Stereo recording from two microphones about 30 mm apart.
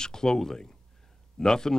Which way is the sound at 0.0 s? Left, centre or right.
Left.